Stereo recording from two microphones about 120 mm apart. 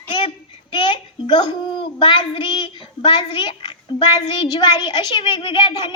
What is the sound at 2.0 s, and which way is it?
Child singing, 40° left (ahead or behind).